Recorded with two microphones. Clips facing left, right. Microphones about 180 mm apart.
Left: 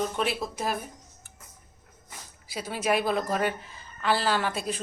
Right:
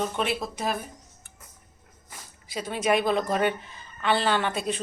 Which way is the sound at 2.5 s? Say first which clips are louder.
Right 2 dB; 5° left (ahead or behind).